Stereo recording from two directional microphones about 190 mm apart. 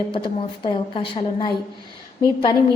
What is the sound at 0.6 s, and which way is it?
Speech, 25° left (ahead or behind).